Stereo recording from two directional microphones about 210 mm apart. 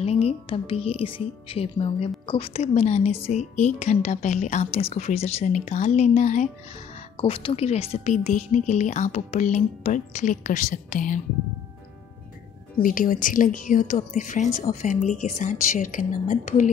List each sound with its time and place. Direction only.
0.0 s speech: 30° left (ahead or behind)
12.8 s speech: 40° left (ahead or behind)